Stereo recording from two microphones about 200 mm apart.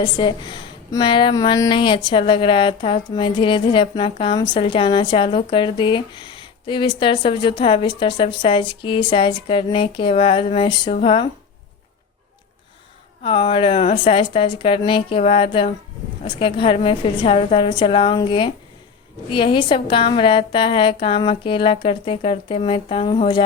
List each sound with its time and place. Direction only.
0.0 s speech: 25° left (ahead or behind)
13.2 s speech: 25° left (ahead or behind)